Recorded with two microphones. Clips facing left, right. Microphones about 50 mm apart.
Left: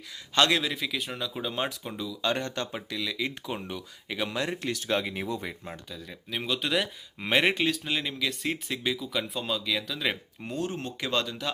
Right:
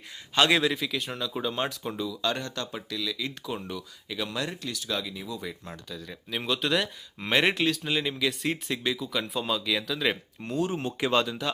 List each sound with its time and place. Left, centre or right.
0.3 s speech: centre
2.2 s speech: left
5.5 s speech: left
5.9 s speech: centre
10.7 s speech: centre